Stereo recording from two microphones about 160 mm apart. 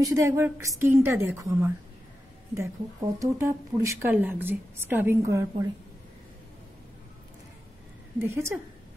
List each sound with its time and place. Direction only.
0.0 s speech: 20° right (ahead or behind)
8.2 s speech: 15° right (ahead or behind)